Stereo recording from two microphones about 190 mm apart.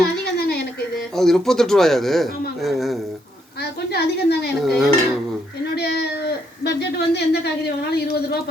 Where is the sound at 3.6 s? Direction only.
55° left (ahead or behind).